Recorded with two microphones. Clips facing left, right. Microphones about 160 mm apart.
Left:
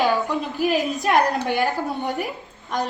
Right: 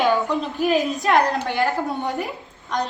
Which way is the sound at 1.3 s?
15° left (ahead or behind).